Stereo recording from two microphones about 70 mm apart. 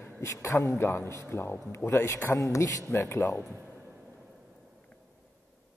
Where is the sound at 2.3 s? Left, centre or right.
Left.